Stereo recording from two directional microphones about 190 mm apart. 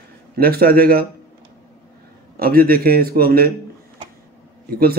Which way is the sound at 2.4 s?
50° right (ahead or behind).